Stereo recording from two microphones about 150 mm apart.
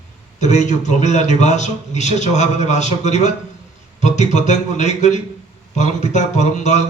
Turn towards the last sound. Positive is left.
turn(degrees=50)  # may be behind; listen again after turning